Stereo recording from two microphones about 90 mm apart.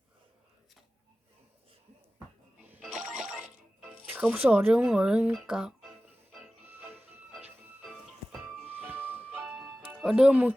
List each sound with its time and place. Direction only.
2.8 s music: centre (ahead or behind)
4.1 s speech: 20° right (ahead or behind)
4.9 s speech: 10° right (ahead or behind)
6.7 s music: 20° right (ahead or behind)
7.8 s music: 5° right (ahead or behind)
8.6 s music: 20° right (ahead or behind)
9.4 s music: 5° right (ahead or behind)
10.0 s speech: 5° right (ahead or behind)